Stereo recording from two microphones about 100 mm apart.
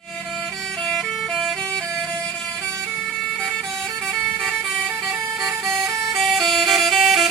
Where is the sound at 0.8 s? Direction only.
5° left (ahead or behind).